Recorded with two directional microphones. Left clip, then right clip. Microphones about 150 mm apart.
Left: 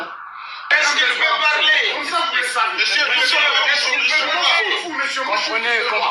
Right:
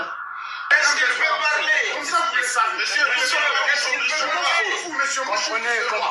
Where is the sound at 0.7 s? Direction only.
45° left (ahead or behind).